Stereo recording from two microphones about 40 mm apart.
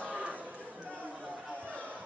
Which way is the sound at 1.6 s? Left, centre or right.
Right.